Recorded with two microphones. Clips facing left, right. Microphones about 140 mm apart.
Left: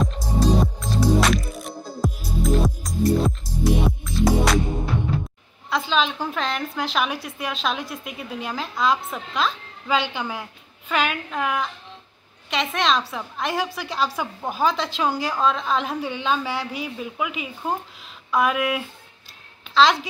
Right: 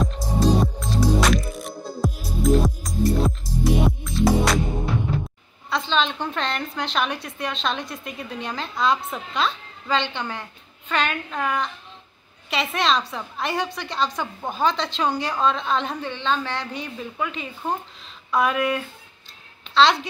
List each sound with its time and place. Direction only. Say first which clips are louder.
0.0 s music: right 1 dB; centre (ahead or behind)
5.7 s a woman's voice: left 1 dB; 5° left (ahead or behind)